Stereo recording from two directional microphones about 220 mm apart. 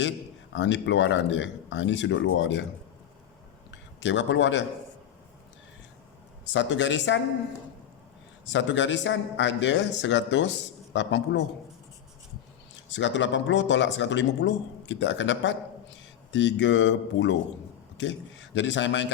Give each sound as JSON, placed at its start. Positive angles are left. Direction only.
{"t": 0.5, "sound": "a man's voice", "side_deg": 55}
{"t": 3.7, "sound": "a man's voice", "side_deg": 55}
{"t": 6.5, "sound": "a man's voice", "side_deg": 55}
{"t": 8.5, "sound": "a man's voice", "side_deg": 55}
{"t": 12.9, "sound": "a man's voice", "side_deg": 55}